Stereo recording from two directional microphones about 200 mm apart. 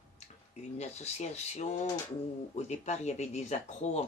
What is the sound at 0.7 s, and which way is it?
Speech, 35° left (ahead or behind).